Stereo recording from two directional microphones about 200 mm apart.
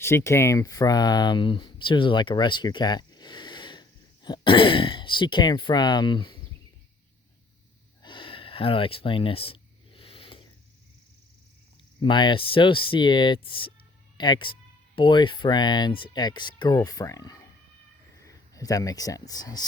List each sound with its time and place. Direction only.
0.0 s speech: 15° left (ahead or behind)
8.0 s a sound: 25° left (ahead or behind)
12.0 s speech: 25° left (ahead or behind)